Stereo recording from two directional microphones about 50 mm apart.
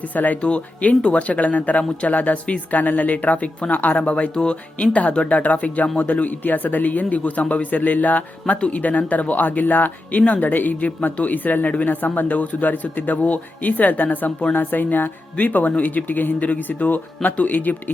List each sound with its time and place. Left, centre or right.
0.1 s speech: left